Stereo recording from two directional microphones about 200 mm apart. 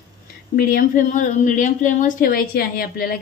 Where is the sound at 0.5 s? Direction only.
45° left (ahead or behind).